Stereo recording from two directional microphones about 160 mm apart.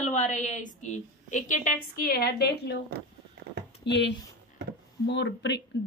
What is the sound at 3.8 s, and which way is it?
Speech, 90° left.